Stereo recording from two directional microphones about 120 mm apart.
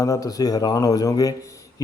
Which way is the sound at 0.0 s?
30° left (ahead or behind).